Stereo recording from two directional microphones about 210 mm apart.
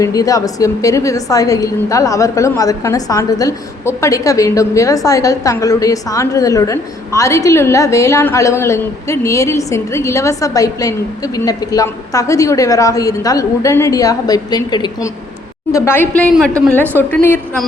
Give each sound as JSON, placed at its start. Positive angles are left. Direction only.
{"t": 0.0, "sound": "a woman's voice", "side_deg": 15}